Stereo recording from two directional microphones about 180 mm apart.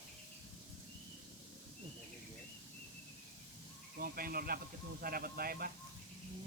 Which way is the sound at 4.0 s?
55° right (ahead or behind).